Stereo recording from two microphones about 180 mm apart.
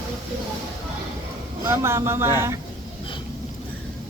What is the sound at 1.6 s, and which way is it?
Speech, 15° right (ahead or behind).